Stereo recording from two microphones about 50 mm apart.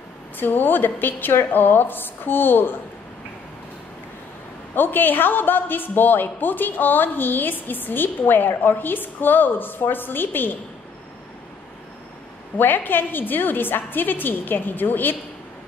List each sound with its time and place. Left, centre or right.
0.4 s a woman's voice: left
4.7 s a woman's voice: left
12.5 s a woman's voice: left